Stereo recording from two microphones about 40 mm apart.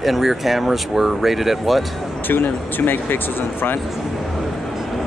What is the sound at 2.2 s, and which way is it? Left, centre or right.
Speech, left.